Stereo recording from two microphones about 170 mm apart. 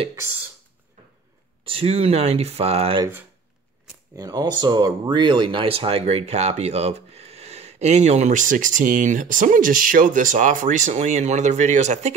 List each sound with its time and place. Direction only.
1.6 s speech: 35° right (ahead or behind)
4.1 s speech: 20° right (ahead or behind); by 12.1 s 40° right (ahead or behind)